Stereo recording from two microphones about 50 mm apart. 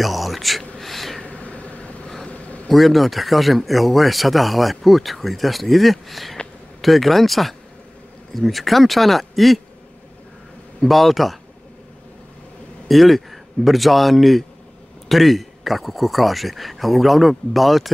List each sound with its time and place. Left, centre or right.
0.0 s speech: centre
0.7 s a sound: centre
1.2 s vehicle: left
2.0 s vehicle: centre
2.7 s speech: centre
10.8 s speech: centre
12.8 s a man's voice: centre